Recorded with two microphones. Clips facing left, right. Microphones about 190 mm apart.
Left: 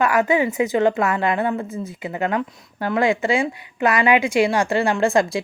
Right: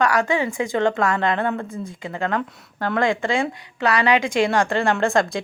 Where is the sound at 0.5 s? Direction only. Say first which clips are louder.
Left 3 dB; 5° left (ahead or behind).